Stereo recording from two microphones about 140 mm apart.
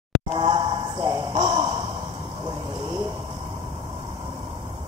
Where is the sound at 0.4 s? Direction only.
35° right (ahead or behind).